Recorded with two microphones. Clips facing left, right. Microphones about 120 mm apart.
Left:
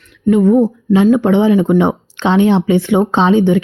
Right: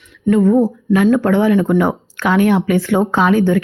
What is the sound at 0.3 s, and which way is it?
Speech, 20° left (ahead or behind).